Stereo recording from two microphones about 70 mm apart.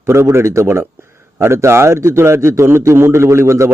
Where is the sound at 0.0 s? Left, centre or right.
Right.